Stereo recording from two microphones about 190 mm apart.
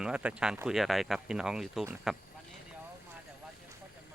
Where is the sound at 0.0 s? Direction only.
5° right (ahead or behind).